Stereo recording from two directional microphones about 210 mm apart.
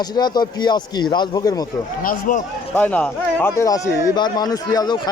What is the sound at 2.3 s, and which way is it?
Speech, 40° left (ahead or behind).